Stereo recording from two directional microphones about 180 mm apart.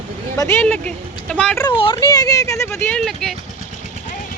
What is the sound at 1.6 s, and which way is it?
Speech, 25° left (ahead or behind).